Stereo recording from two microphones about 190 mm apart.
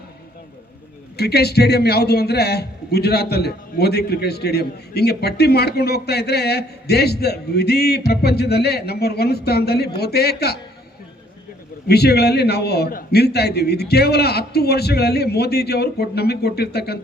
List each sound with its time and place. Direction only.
1.1 s a man's voice: 60° left (ahead or behind)
11.9 s a man's voice: 60° left (ahead or behind)